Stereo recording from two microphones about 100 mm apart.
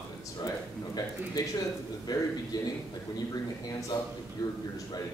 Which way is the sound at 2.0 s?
40° left (ahead or behind).